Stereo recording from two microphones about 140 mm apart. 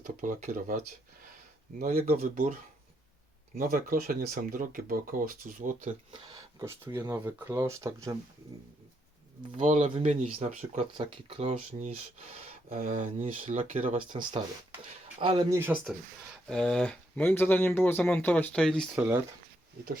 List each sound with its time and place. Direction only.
0.0 s speech: 65° right (ahead or behind)
1.8 s speech: 90° right
2.3 s speech: 65° right (ahead or behind)
3.6 s speech: 80° right
6.6 s speech: 20° right (ahead or behind)
9.6 s speech: 60° right (ahead or behind)
10.9 s speech: 40° right (ahead or behind)
12.8 s speech: 70° right (ahead or behind)
14.1 s speech: 30° right (ahead or behind)
15.4 s speech: 15° right (ahead or behind)
16.5 s speech: 5° left (ahead or behind)
18.9 s speech: 15° right (ahead or behind)